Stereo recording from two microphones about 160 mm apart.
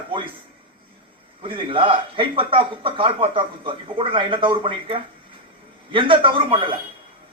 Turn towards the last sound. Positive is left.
turn(degrees=-35)  # may be behind; listen again after turning